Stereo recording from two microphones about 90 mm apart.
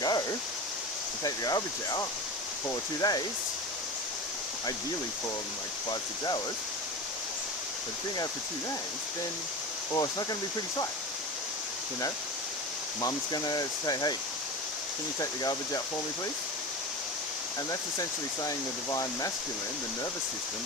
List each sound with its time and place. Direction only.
0.0 s a sound: 45° left (ahead or behind)
1.2 s speech: 45° left (ahead or behind)
5.9 s speech: 50° left (ahead or behind)
9.9 s speech: 45° left (ahead or behind)
13.0 s speech: 45° left (ahead or behind)
15.2 s speech: 40° left (ahead or behind)
18.4 s speech: 40° left (ahead or behind)